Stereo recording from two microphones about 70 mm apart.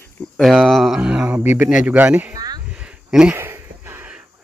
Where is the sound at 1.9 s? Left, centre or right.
Right.